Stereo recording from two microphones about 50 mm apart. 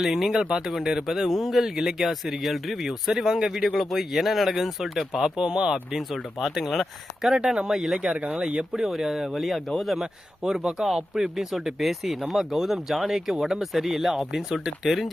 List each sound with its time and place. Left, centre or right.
0.0 s speech: centre
5.4 s speech: centre
6.0 s speech: centre
7.3 s speech: centre
10.4 s speech: centre